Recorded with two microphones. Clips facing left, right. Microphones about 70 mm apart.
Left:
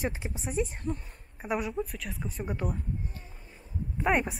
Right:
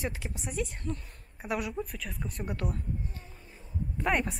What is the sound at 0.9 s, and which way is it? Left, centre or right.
Speech, left.